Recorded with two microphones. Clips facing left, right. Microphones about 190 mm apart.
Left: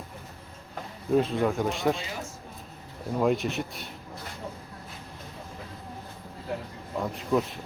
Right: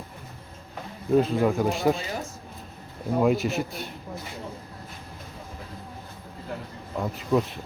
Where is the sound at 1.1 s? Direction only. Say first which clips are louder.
Right 3 dB; centre (ahead or behind).